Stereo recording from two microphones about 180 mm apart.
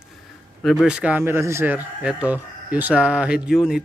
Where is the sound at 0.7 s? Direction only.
Centre (ahead or behind).